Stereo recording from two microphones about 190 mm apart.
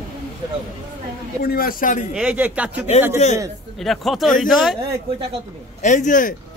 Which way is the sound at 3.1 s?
35° left (ahead or behind).